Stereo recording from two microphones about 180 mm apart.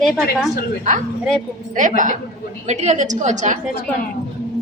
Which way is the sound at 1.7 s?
45° right (ahead or behind).